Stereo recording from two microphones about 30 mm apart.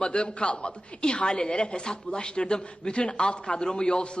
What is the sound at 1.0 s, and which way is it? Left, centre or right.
A man's voice, left.